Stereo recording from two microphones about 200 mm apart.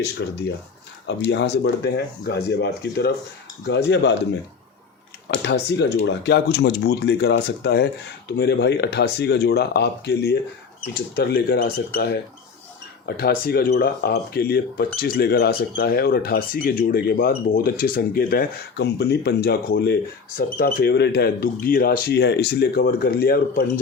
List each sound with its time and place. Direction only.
0.0 s speech: 60° left (ahead or behind)
5.3 s speech: 60° left (ahead or behind)